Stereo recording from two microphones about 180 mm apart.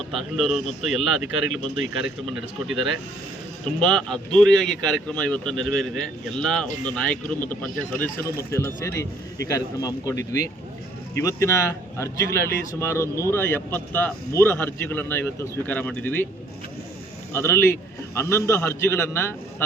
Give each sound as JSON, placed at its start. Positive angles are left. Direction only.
{"t": 0.1, "sound": "speech", "side_deg": 0}
{"t": 17.3, "sound": "speech", "side_deg": 15}